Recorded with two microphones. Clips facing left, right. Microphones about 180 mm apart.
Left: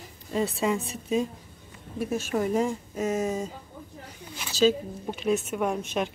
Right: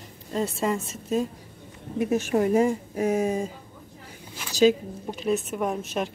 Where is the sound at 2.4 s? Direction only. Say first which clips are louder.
Right 4 dB; 5° right (ahead or behind).